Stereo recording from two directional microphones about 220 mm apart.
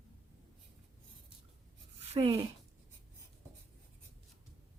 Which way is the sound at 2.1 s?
25° right (ahead or behind).